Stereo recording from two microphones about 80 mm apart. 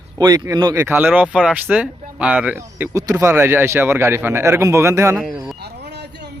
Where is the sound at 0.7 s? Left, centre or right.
Right.